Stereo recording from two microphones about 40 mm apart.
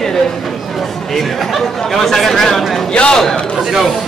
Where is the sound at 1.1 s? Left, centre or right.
Centre.